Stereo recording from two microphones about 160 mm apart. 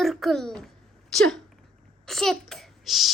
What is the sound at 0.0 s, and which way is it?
Speech, centre (ahead or behind).